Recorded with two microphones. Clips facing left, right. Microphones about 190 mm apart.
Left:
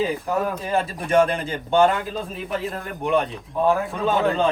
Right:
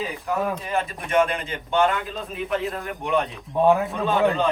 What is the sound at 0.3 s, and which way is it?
A man's voice, 30° left (ahead or behind).